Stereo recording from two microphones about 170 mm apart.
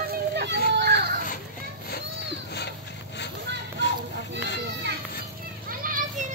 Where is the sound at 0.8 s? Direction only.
70° right (ahead or behind).